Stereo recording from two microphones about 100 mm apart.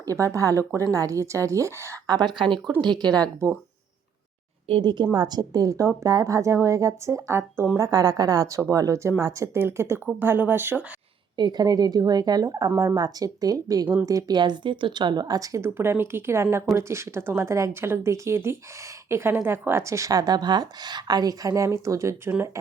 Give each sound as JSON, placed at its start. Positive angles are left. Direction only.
{"t": 0.0, "sound": "a woman's voice", "side_deg": -35}
{"t": 2.4, "sound": "speech", "side_deg": -55}
{"t": 2.8, "sound": "speech", "side_deg": -45}
{"t": 4.8, "sound": "a woman's voice", "side_deg": -50}
{"t": 7.8, "sound": "a woman's voice", "side_deg": -35}
{"t": 11.3, "sound": "a woman's voice", "side_deg": -45}